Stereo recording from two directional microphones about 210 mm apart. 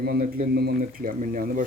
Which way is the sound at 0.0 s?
45° right (ahead or behind).